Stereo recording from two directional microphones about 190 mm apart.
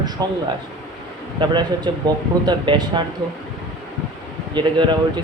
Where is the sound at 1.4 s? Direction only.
25° right (ahead or behind).